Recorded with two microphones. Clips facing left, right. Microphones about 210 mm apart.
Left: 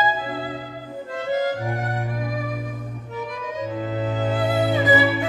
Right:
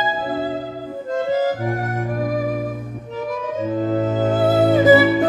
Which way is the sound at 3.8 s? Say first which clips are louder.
Right 7 dB; 40° right (ahead or behind).